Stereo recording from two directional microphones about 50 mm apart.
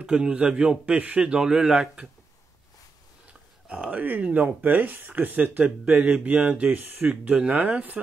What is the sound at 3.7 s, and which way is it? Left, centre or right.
Speech, right.